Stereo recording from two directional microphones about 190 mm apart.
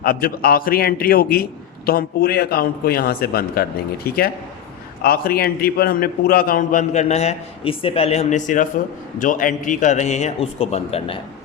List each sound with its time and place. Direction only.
0.0 s a man's voice: 50° left (ahead or behind); by 11.2 s 30° left (ahead or behind)